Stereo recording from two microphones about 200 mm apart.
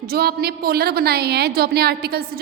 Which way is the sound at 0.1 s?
50° right (ahead or behind).